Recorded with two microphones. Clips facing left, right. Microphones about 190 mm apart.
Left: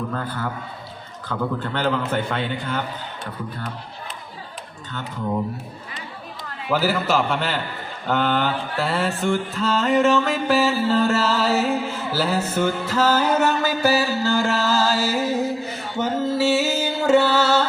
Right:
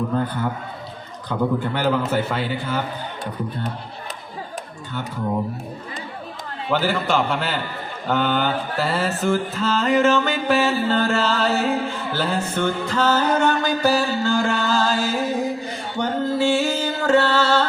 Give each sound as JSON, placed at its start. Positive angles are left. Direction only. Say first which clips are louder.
{"t": 0.1, "sound": "a man's voice", "louder": "right 5 dB", "side_deg": -20}
{"t": 6.7, "sound": "mantra", "louder": "even", "side_deg": 5}
{"t": 16.0, "sound": "music", "louder": "even", "side_deg": 5}